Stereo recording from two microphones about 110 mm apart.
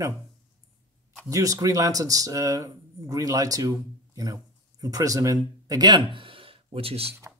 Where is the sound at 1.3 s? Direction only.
30° right (ahead or behind).